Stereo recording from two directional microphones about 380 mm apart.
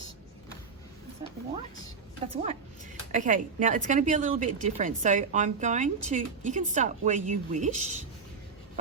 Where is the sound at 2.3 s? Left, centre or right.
Centre.